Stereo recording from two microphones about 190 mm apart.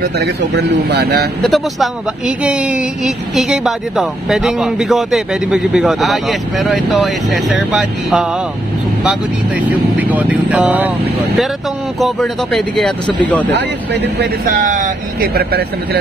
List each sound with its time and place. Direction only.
0.0 s speech: 60° right (ahead or behind)
1.4 s speech: centre (ahead or behind)
9.6 s speech: 10° right (ahead or behind)
12.0 s speech: 5° left (ahead or behind)
13.5 s speech: 65° right (ahead or behind)
14.4 s speech: 45° right (ahead or behind)